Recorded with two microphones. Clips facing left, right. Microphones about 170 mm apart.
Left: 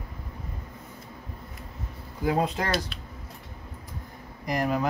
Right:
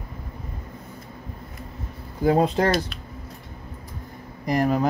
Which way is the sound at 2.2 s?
35° right (ahead or behind).